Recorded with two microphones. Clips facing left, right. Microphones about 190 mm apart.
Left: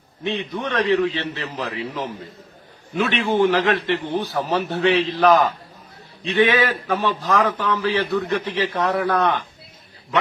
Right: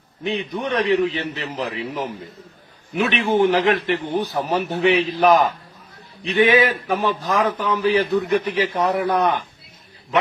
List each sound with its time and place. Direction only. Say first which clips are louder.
0.3 s a man's voice: right 2 dB; 20° right (ahead or behind)